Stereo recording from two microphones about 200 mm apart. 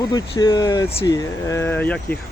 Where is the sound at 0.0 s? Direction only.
20° left (ahead or behind).